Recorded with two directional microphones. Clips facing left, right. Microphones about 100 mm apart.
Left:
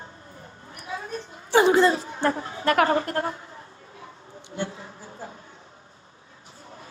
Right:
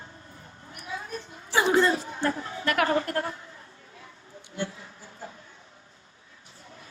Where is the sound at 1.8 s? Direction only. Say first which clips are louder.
Left 3 dB; 30° left (ahead or behind).